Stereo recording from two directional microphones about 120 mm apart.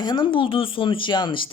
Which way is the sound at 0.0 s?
40° left (ahead or behind).